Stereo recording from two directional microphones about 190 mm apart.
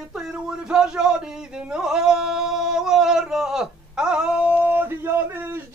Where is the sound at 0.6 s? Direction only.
5° right (ahead or behind).